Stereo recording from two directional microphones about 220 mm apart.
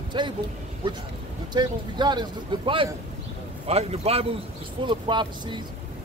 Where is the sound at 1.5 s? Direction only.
20° right (ahead or behind).